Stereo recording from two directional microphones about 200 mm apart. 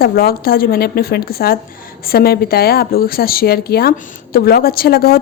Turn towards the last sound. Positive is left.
turn(degrees=50)  # may be behind; listen again after turning